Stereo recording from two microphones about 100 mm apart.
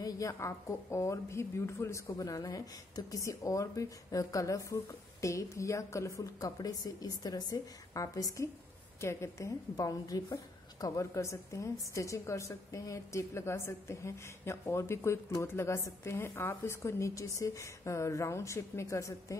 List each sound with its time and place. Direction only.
0.0 s a woman's voice: 35° left (ahead or behind)